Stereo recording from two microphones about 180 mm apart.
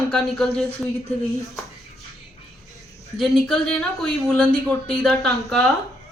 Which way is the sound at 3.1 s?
Centre (ahead or behind).